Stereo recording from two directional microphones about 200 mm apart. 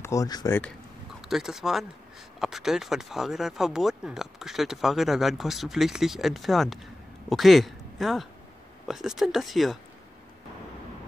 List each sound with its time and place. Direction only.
0.0 s speech: 15° left (ahead or behind)
1.3 s speech: centre (ahead or behind)